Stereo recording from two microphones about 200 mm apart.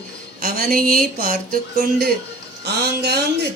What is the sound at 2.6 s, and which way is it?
Speech, 55° right (ahead or behind).